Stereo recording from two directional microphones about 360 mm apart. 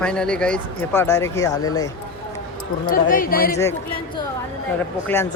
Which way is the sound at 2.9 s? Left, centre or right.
Left.